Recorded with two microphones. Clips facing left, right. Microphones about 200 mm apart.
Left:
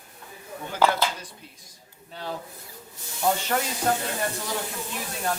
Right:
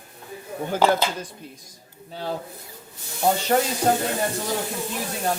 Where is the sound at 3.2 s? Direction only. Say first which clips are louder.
Right 5 dB; 30° right (ahead or behind).